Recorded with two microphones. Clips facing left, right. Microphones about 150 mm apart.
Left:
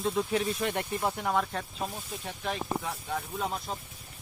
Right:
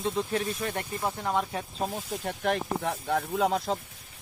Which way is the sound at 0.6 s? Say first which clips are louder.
Left 2 dB; 15° left (ahead or behind).